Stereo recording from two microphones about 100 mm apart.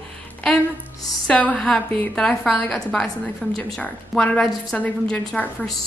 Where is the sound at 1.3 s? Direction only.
10° left (ahead or behind).